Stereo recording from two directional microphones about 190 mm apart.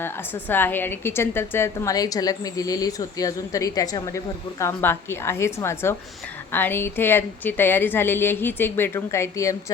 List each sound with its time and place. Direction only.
0.0 s a woman's voice: 10° left (ahead or behind)